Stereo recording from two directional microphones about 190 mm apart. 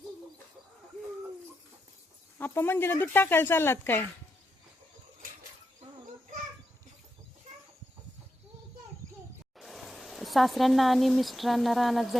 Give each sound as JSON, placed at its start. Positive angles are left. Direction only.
{"t": 2.4, "sound": "speech", "side_deg": 10}
{"t": 9.6, "sound": "speech", "side_deg": 0}